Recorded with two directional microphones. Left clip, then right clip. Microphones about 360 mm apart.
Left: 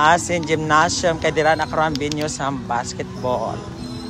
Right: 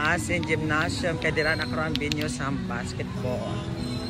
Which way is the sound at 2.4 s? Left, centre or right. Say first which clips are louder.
Left 8 dB; centre.